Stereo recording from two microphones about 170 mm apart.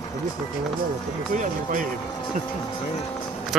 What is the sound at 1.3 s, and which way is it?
Speech, 50° right (ahead or behind).